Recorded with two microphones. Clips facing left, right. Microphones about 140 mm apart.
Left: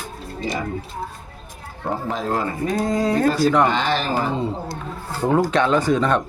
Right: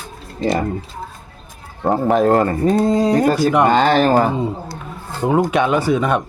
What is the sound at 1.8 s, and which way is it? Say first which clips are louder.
Speech: right 10 dB; 60° right (ahead or behind).